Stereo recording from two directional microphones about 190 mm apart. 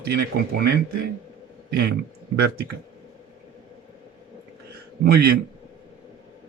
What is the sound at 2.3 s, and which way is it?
Speech, 55° right (ahead or behind).